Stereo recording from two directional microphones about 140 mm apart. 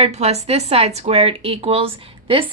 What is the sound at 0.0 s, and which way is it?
Speech, 50° right (ahead or behind).